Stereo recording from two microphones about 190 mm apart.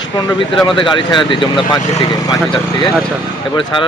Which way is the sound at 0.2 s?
25° left (ahead or behind).